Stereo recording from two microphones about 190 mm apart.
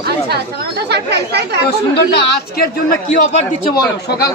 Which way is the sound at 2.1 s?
50° left (ahead or behind).